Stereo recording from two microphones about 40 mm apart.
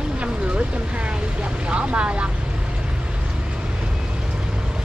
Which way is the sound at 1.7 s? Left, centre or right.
Right.